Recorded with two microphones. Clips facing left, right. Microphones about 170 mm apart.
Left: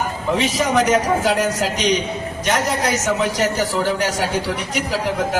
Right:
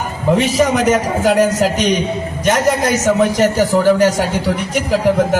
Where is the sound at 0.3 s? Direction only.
45° right (ahead or behind).